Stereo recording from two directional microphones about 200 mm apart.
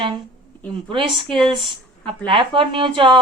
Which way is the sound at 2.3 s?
25° right (ahead or behind).